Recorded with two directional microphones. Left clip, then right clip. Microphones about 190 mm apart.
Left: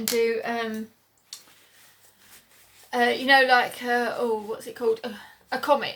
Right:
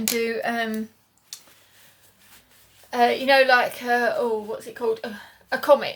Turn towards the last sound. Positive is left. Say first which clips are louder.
# right 5 dB
turn(degrees=-20)  # may be behind; listen again after turning